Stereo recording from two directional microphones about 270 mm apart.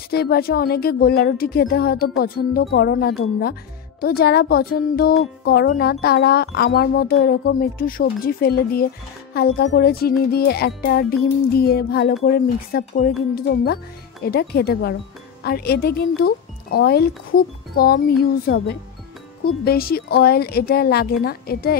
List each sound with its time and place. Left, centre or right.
0.1 s speech: left